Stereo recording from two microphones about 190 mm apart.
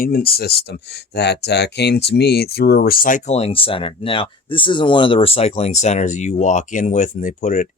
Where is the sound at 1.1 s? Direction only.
60° left (ahead or behind).